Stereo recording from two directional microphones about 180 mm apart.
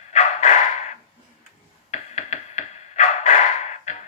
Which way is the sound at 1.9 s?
40° left (ahead or behind).